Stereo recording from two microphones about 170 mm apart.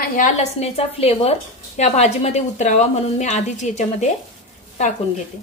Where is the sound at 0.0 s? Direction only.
45° left (ahead or behind).